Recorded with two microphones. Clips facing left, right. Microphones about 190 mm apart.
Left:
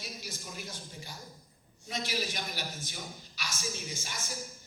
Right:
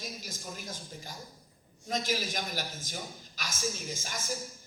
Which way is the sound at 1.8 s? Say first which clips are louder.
Right 3 dB; 45° right (ahead or behind).